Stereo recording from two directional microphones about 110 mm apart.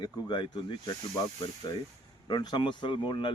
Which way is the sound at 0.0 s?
45° left (ahead or behind).